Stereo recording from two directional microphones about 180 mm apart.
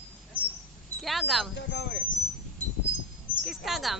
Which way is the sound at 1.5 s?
70° left (ahead or behind).